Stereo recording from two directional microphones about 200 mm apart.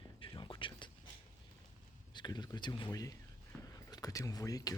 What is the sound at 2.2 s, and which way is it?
Speech, 20° left (ahead or behind).